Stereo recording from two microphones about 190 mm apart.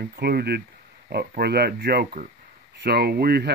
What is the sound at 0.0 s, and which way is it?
Speech, 55° right (ahead or behind).